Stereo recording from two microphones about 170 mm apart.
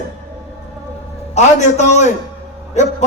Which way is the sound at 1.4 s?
40° left (ahead or behind).